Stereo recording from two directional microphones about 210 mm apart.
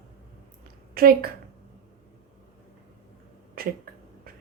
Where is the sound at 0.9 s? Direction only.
45° right (ahead or behind).